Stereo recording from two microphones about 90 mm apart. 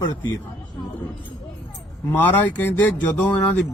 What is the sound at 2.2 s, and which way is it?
Speech, 20° left (ahead or behind).